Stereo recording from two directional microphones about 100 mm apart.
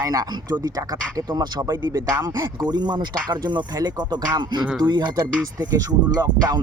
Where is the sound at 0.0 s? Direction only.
40° right (ahead or behind).